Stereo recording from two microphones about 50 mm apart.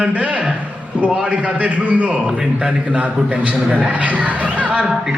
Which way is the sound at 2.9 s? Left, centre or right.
Right.